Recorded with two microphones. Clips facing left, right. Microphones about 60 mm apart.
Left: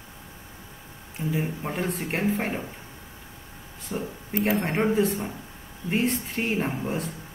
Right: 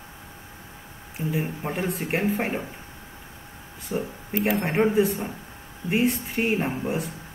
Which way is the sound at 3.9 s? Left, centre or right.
Centre.